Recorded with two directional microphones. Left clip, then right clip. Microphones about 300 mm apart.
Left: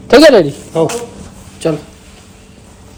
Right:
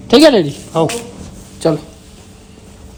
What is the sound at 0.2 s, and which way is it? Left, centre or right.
Speech, centre.